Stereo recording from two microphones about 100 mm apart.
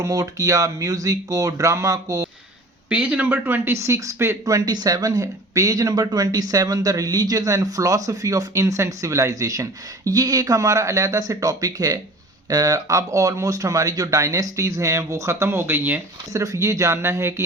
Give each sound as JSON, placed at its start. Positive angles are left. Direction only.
{"t": 0.0, "sound": "speech", "side_deg": -35}
{"t": 2.9, "sound": "speech", "side_deg": -15}
{"t": 16.3, "sound": "speech", "side_deg": -35}